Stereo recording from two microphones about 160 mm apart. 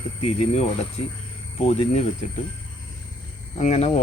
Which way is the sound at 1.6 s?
45° left (ahead or behind).